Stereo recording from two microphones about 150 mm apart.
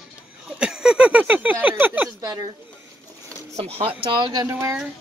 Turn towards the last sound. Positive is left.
turn(degrees=-15)  # may be behind; listen again after turning